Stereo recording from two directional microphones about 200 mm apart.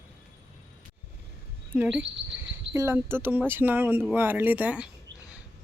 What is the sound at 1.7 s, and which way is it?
Speech, 5° right (ahead or behind).